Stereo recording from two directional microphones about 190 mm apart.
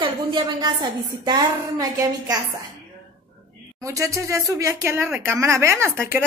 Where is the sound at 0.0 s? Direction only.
25° right (ahead or behind).